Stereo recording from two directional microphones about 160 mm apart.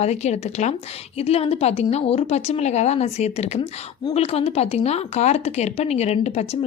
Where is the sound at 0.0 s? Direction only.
45° left (ahead or behind).